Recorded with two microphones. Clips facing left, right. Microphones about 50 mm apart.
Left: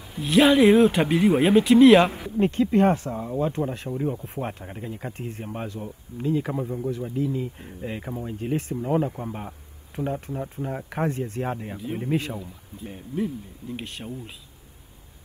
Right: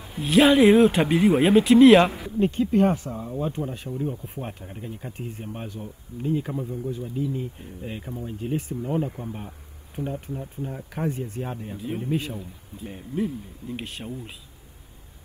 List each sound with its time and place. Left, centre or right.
0.2 s speech: centre
2.3 s speech: left
12.8 s speech: centre